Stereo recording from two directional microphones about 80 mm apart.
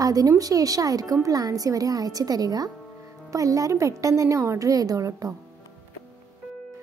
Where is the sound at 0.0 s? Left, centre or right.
Right.